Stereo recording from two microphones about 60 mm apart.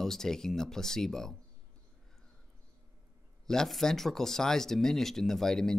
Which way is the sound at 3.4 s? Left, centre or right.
Centre.